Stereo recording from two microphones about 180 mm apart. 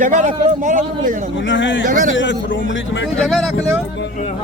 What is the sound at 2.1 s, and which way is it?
Speech, 90° left.